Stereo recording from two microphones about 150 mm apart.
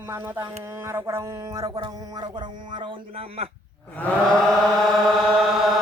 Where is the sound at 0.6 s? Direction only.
20° right (ahead or behind); by 3.5 s 40° right (ahead or behind).